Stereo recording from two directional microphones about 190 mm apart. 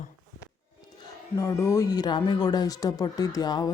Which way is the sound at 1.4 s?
15° left (ahead or behind).